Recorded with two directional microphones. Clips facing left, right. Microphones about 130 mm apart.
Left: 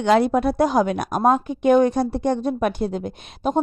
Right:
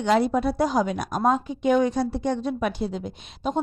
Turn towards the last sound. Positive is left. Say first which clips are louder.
# left 5 dB
turn(degrees=55)  # may be behind; listen again after turning